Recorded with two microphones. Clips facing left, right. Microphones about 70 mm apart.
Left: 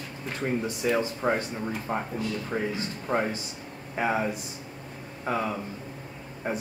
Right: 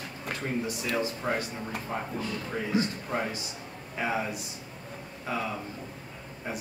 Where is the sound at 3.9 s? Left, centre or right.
Left.